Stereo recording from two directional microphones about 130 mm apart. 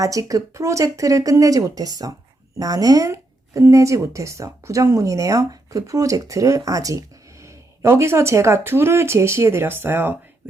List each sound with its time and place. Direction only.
0.0 s speech: 25° right (ahead or behind)